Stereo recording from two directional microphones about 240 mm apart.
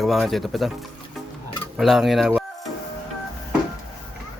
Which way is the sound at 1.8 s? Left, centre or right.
Centre.